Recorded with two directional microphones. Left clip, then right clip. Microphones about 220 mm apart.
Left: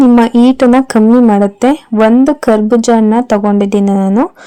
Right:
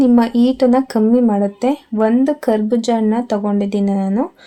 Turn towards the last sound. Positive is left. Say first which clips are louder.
# left 7 dB
turn(degrees=35)  # may be behind; listen again after turning